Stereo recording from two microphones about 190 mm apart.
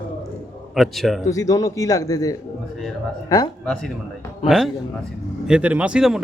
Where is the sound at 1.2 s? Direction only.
15° left (ahead or behind).